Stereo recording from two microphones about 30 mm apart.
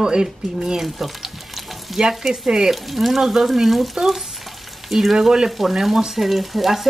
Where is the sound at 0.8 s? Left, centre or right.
Centre.